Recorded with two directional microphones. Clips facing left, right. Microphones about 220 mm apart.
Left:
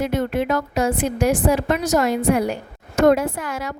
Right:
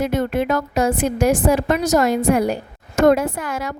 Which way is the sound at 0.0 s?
45° right (ahead or behind).